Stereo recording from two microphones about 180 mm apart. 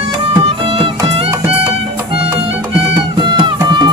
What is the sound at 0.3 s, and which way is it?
Music, 30° right (ahead or behind).